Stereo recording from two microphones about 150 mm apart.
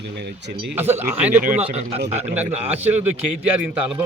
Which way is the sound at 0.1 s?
90° right.